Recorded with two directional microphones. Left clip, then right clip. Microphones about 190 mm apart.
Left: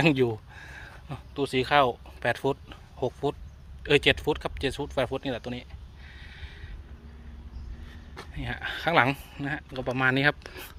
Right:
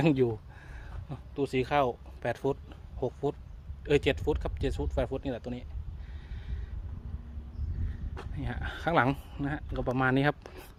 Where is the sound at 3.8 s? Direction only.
5° left (ahead or behind).